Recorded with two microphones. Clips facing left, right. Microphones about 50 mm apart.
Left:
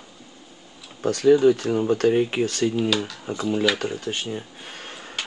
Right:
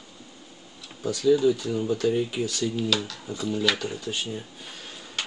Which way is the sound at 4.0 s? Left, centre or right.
Left.